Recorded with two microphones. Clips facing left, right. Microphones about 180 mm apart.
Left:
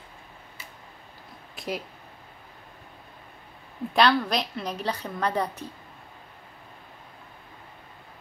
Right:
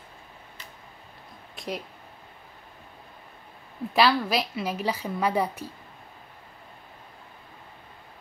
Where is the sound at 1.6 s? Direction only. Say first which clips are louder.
Left 1 dB; centre (ahead or behind).